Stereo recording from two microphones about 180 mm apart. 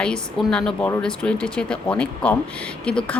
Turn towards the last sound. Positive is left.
turn(degrees=5)  # may be behind; listen again after turning